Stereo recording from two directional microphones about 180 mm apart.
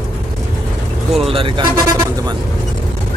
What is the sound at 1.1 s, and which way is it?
Speech, 30° right (ahead or behind).